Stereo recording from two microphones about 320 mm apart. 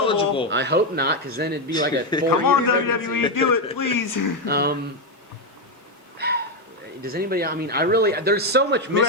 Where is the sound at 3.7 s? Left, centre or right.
Left.